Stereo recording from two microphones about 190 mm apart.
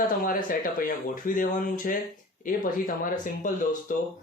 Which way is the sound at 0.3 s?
45° left (ahead or behind).